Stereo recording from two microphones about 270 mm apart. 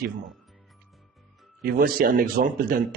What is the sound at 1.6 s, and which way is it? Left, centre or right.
A man's voice, right.